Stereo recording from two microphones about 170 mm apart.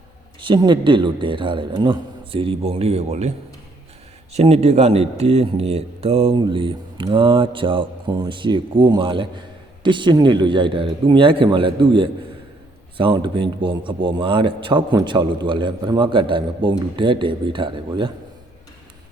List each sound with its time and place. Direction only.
0.4 s speech: 25° right (ahead or behind)